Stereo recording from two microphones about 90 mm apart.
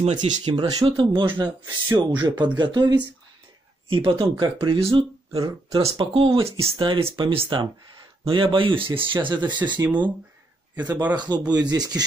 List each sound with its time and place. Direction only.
0.0 s speech: 70° right (ahead or behind)
0.7 s speech: 90° right
1.0 s speech: 60° right (ahead or behind)
3.9 s speech: 70° right (ahead or behind)
7.2 s speech: 70° right (ahead or behind)
10.8 s speech: 20° right (ahead or behind)
11.1 s speech: 55° right (ahead or behind)